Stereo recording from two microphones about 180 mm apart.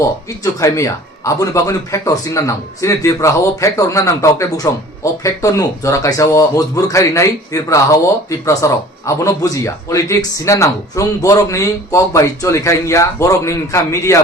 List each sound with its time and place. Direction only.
0.4 s a man's voice: 20° left (ahead or behind)